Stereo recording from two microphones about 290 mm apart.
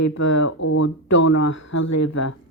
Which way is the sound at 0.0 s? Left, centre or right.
Left.